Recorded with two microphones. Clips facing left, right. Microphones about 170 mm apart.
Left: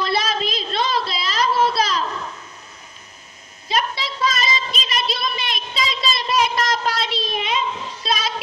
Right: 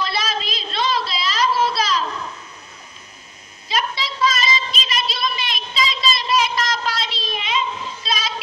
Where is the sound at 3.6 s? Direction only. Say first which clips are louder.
Left 1 dB; 50° left (ahead or behind).